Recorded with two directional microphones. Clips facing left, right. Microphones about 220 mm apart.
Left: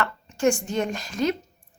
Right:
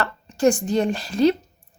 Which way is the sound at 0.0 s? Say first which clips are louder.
Right 3 dB; 35° right (ahead or behind).